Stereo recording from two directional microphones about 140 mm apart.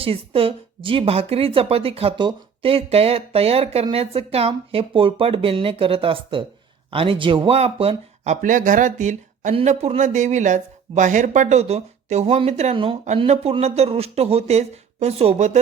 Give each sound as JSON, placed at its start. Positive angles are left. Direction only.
{"t": 0.0, "sound": "a woman's voice", "side_deg": -40}
{"t": 12.7, "sound": "speech", "side_deg": -35}
{"t": 13.1, "sound": "a woman's voice", "side_deg": -50}